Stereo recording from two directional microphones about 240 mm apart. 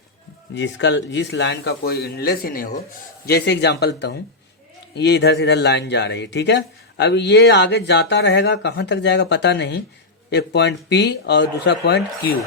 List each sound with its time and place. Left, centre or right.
0.5 s a man's voice: left